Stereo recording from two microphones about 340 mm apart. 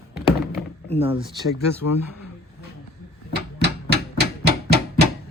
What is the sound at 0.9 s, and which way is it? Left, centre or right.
Speech, centre.